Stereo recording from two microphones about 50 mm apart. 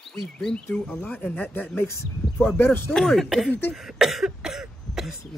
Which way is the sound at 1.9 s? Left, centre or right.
Left.